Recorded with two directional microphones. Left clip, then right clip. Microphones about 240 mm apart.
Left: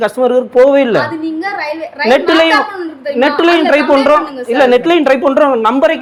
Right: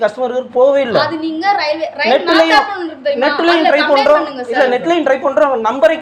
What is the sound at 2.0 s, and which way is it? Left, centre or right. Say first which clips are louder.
A woman's voice: left 2 dB; left.